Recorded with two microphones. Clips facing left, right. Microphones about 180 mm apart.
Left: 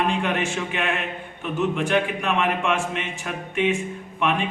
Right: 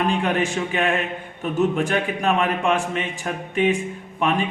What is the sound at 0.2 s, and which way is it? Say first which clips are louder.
A man's voice: right 3 dB; 35° right (ahead or behind).